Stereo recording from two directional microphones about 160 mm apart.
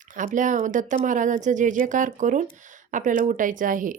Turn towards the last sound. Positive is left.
turn(degrees=-55)  # may be behind; listen again after turning